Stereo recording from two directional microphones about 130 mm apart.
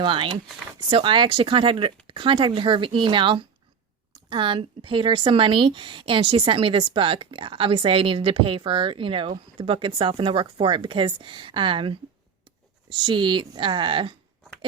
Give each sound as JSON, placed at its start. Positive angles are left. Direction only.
{"t": 0.0, "sound": "speech", "side_deg": -40}